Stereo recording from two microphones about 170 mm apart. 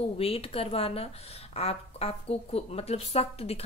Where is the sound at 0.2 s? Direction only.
35° left (ahead or behind).